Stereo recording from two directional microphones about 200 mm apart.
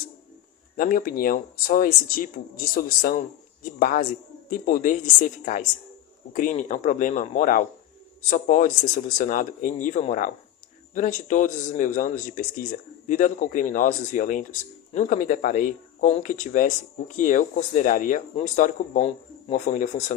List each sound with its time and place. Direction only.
0.8 s speech: 45° left (ahead or behind)